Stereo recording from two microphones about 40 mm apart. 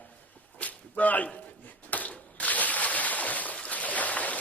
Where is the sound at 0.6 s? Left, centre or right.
Left.